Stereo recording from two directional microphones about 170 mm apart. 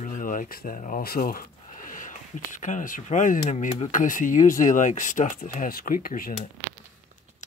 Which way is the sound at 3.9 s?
50° left (ahead or behind).